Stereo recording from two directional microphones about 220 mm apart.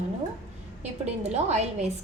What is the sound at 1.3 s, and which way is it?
Speech, 30° right (ahead or behind).